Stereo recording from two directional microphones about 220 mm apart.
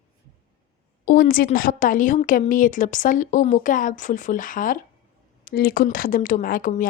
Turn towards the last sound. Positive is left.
turn(degrees=40)  # may be behind; listen again after turning